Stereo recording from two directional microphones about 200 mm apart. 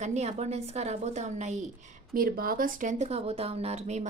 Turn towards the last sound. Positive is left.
turn(degrees=-35)  # may be behind; listen again after turning